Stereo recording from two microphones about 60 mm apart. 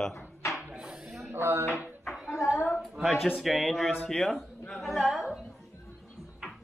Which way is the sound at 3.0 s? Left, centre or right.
Centre.